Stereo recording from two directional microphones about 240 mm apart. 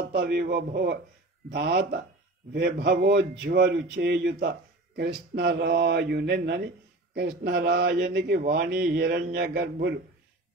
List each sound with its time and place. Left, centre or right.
0.1 s speech: right